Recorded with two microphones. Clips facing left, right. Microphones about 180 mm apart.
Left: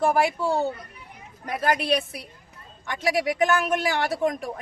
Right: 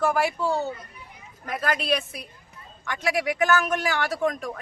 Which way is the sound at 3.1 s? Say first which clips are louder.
Left 1 dB; 30° left (ahead or behind).